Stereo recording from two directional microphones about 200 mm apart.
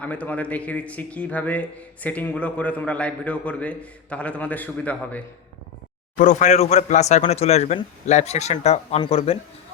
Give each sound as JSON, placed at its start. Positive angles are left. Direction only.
{"t": 0.0, "sound": "speech", "side_deg": 5}
{"t": 6.1, "sound": "speech", "side_deg": 35}